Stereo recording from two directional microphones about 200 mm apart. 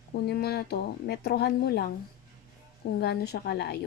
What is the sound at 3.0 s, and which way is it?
Speech, 55° left (ahead or behind).